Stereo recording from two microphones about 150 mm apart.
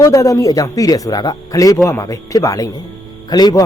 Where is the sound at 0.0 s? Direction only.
20° left (ahead or behind).